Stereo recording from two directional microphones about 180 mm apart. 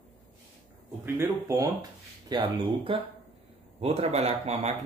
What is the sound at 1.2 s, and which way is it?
Speech, 15° right (ahead or behind).